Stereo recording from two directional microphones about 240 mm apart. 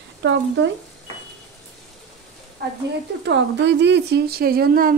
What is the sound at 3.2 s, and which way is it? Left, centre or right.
Speech, right.